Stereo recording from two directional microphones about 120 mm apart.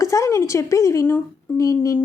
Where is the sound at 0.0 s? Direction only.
25° left (ahead or behind).